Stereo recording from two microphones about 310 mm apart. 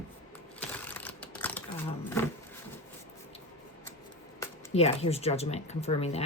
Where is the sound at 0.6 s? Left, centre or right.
Centre.